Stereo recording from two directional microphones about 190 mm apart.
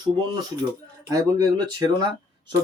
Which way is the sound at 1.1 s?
20° right (ahead or behind).